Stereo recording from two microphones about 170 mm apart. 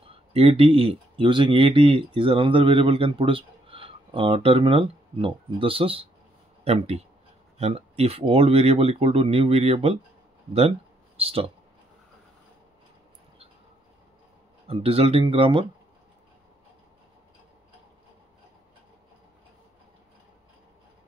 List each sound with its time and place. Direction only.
0.3 s speech: 35° right (ahead or behind)
11.1 s speech: 35° right (ahead or behind)
14.7 s speech: 35° right (ahead or behind)